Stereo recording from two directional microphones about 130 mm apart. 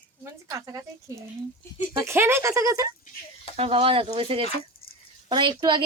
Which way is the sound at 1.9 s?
20° right (ahead or behind).